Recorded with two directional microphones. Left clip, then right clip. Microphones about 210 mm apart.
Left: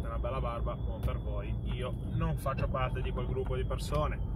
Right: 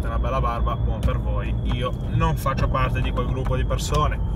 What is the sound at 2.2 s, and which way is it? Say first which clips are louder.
Speech: right 12 dB; 20° right (ahead or behind).